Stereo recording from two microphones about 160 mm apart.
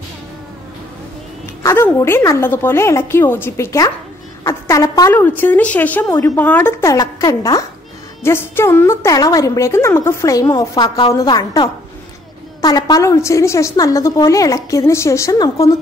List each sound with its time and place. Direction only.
1.6 s a woman's voice: 15° left (ahead or behind)
5.1 s a woman's voice: 10° left (ahead or behind)